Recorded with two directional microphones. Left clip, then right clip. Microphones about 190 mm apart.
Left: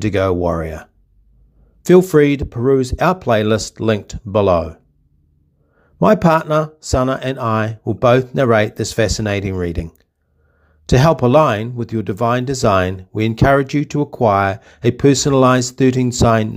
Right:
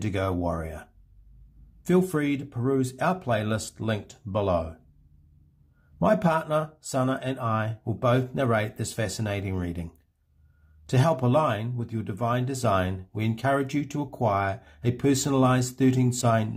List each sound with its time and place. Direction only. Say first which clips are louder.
0.0 s speech: left 12 dB; 40° left (ahead or behind)
5.9 s speech: left 11 dB; 45° left (ahead or behind)
10.9 s speech: left 12 dB; 40° left (ahead or behind)